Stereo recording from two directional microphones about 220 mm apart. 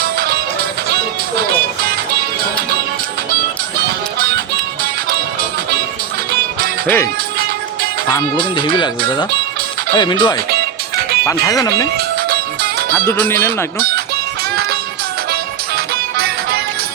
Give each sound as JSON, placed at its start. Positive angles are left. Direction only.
{"t": 4.8, "sound": "music", "side_deg": -45}
{"t": 6.8, "sound": "speech", "side_deg": 10}
{"t": 8.1, "sound": "speech", "side_deg": 20}
{"t": 9.9, "sound": "speech", "side_deg": 20}
{"t": 13.1, "sound": "speech", "side_deg": 10}
{"t": 13.7, "sound": "speech", "side_deg": -45}
{"t": 15.3, "sound": "music", "side_deg": -45}